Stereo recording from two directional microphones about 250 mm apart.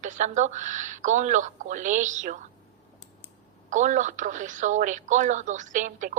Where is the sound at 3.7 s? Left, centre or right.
Right.